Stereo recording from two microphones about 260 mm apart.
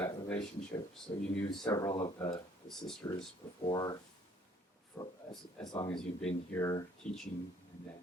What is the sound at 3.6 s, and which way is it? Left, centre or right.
Speech, centre.